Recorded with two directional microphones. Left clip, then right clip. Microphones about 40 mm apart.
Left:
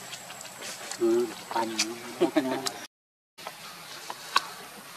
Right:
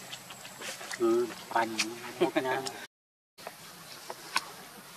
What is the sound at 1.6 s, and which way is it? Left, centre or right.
Speech, centre.